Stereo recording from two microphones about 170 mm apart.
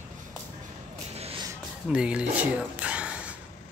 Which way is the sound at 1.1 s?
35° right (ahead or behind).